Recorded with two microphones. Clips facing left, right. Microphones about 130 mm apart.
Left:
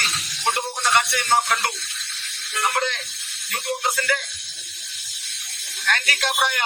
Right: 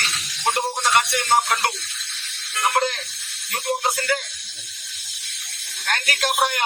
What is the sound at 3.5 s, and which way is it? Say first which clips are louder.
Speech: right 2 dB; 40° right (ahead or behind).